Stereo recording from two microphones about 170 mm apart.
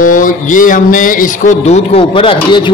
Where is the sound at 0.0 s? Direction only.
50° left (ahead or behind).